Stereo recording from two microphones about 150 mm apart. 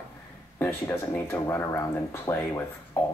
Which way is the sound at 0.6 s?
15° left (ahead or behind).